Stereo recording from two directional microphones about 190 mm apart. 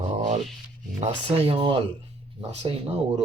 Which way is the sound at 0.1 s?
35° right (ahead or behind).